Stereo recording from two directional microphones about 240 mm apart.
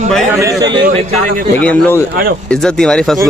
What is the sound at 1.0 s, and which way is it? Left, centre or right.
Speech, right.